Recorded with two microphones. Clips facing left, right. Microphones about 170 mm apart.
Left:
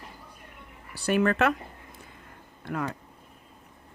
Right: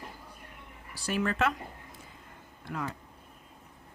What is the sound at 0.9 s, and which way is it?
Speech, 60° left (ahead or behind).